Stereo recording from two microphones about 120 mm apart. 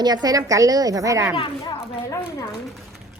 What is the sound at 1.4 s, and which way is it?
Speech, 40° left (ahead or behind).